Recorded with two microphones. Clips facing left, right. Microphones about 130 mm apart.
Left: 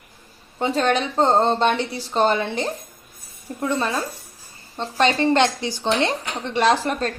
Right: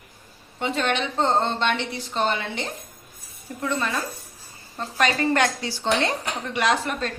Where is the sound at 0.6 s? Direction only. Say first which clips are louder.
Left 4 dB; 35° left (ahead or behind).